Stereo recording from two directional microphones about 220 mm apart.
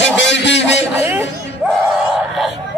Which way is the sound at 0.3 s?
55° left (ahead or behind).